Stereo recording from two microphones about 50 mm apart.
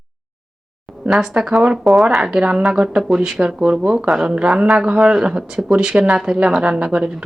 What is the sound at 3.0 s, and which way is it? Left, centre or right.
Speech, centre.